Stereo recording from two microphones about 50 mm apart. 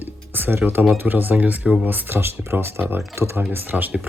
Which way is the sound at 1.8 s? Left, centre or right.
Right.